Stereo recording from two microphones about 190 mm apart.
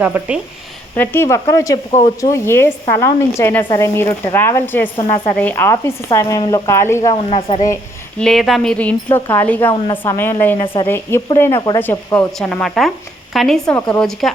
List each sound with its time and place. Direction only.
0.0 s a woman's voice: 10° right (ahead or behind)
0.9 s speech: 10° left (ahead or behind)
1.9 s a woman's voice: 35° left (ahead or behind)
2.2 s speech: 15° left (ahead or behind)
4.9 s a woman's voice: 25° left (ahead or behind)
5.3 s speech: 10° left (ahead or behind)
7.3 s a woman's voice: 30° left (ahead or behind)
8.2 s a woman's voice: centre (ahead or behind)
9.7 s a woman's voice: 25° left (ahead or behind)
10.0 s a woman's voice: 10° left (ahead or behind)